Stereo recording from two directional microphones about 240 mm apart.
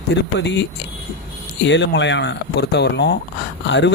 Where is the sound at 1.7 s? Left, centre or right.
Left.